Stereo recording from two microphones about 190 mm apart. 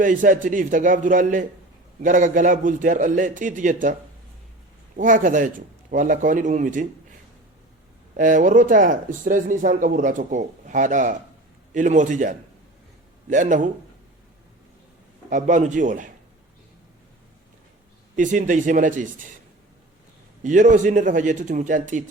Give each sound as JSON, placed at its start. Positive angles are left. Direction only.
{"t": 0.0, "sound": "speech", "side_deg": -45}
{"t": 4.9, "sound": "speech", "side_deg": -45}
{"t": 8.1, "sound": "a man's voice", "side_deg": -45}
{"t": 15.3, "sound": "a man's voice", "side_deg": -40}
{"t": 18.2, "sound": "speech", "side_deg": -40}
{"t": 20.4, "sound": "speech", "side_deg": -40}